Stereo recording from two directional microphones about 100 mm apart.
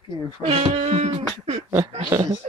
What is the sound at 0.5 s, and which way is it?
Beatboxing, 90° right.